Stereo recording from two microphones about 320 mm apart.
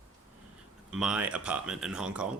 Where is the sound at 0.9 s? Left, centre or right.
Centre.